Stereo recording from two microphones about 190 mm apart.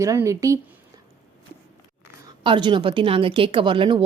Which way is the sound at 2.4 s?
25° right (ahead or behind).